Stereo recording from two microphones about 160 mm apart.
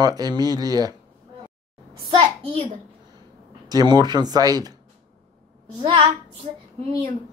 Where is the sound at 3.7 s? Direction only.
25° right (ahead or behind).